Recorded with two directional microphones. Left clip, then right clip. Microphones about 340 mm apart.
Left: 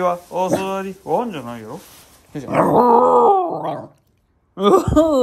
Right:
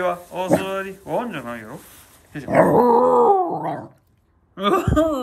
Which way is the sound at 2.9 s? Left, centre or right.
Centre.